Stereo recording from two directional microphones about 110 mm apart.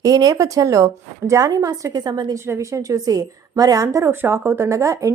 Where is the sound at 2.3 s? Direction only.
25° right (ahead or behind).